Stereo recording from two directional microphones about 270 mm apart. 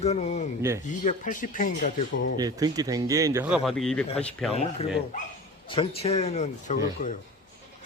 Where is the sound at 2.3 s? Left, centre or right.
Centre.